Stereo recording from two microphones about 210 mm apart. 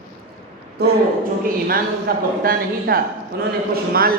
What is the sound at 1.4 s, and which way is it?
A woman's voice, 45° right (ahead or behind).